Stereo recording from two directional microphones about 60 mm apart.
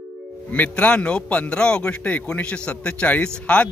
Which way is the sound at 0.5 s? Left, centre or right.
Left.